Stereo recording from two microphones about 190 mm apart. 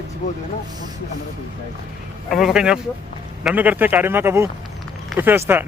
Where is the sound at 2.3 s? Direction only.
Centre (ahead or behind).